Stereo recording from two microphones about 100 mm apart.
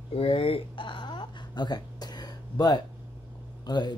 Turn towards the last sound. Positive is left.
turn(degrees=45)  # may be behind; listen again after turning